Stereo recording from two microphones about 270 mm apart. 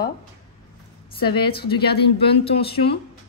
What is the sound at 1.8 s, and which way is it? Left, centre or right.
Speech, left.